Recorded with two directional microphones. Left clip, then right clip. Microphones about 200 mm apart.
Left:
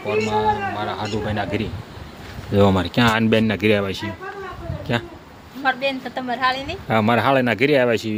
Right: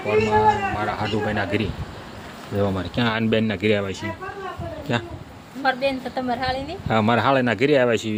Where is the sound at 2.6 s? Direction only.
50° left (ahead or behind).